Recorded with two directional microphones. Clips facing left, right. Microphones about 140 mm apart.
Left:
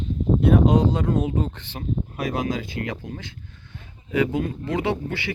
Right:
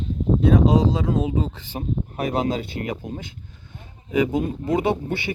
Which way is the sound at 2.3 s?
25° right (ahead or behind).